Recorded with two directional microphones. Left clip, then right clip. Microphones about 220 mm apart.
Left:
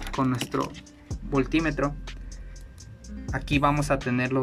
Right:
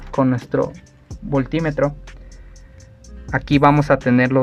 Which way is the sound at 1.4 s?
35° right (ahead or behind).